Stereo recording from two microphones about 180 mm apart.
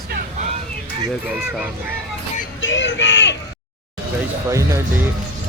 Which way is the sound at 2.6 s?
90° left.